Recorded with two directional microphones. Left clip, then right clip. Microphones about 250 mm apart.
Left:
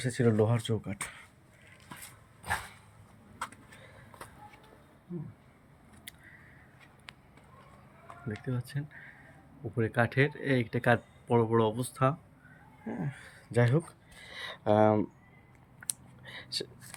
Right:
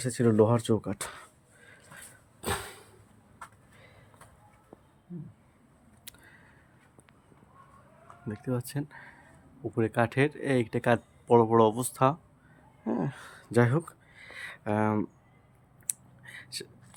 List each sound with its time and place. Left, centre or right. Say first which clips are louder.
0.0 s speech: right 4 dB; centre
8.4 s speech: right 6 dB; centre
13.0 s a sound: right 7 dB; centre
15.9 s whispering: right 1 dB; centre